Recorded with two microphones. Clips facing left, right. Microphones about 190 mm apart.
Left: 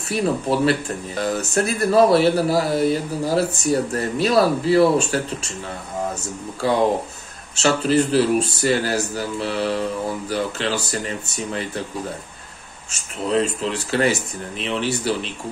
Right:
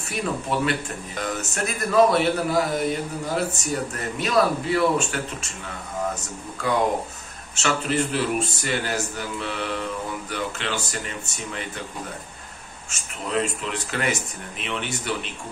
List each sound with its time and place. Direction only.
0.1 s speech: 35° left (ahead or behind)
7.5 s speech: 35° left (ahead or behind)
12.9 s speech: 35° left (ahead or behind)